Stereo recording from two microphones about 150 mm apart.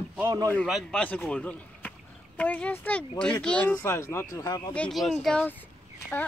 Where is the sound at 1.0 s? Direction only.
10° left (ahead or behind); by 4.7 s 25° left (ahead or behind).